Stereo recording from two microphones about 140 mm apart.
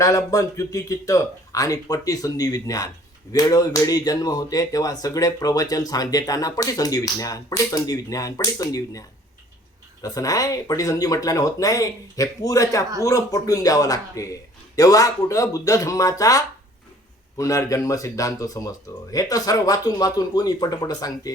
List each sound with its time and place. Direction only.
0.0 s speech: 25° left (ahead or behind)